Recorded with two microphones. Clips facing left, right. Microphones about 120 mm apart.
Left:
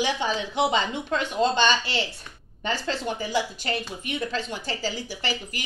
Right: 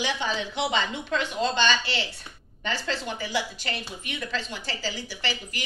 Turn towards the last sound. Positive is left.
turn(degrees=45)  # may be behind; listen again after turning